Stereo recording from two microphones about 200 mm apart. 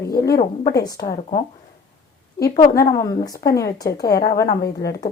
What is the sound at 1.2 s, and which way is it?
Speech, 30° left (ahead or behind).